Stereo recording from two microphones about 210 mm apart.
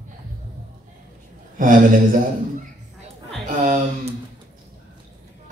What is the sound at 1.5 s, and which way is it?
Speech, 40° right (ahead or behind).